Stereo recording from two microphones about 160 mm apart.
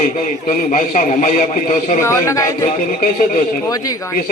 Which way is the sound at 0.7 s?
55° left (ahead or behind).